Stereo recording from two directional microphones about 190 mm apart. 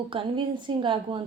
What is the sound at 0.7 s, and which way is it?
Speech, 25° right (ahead or behind).